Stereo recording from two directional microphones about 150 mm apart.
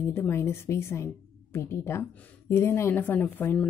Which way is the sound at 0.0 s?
15° left (ahead or behind).